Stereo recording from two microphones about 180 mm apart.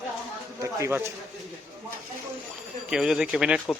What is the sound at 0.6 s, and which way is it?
Speech, 15° right (ahead or behind).